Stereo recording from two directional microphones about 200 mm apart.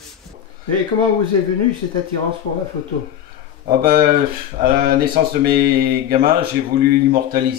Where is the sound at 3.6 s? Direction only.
45° right (ahead or behind).